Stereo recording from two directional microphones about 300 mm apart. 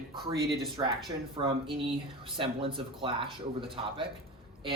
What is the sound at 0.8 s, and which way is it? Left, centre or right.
Speech, centre.